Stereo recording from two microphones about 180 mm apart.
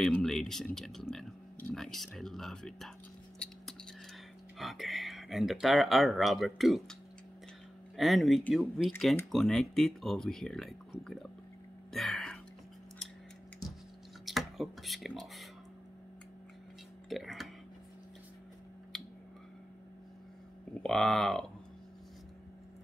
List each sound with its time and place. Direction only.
0.0 s speech: centre (ahead or behind)
3.4 s a sound: 5° left (ahead or behind)
4.6 s speech: centre (ahead or behind)
11.9 s a sound: centre (ahead or behind)
14.2 s speech: centre (ahead or behind)
17.1 s speech: centre (ahead or behind)
20.8 s speech: centre (ahead or behind)